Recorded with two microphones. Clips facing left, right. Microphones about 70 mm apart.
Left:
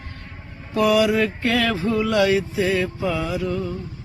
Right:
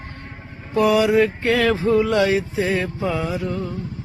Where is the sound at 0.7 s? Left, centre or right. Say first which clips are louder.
Right 2 dB; right.